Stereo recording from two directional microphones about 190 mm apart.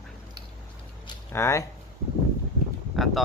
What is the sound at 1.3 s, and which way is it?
Speech, 15° left (ahead or behind).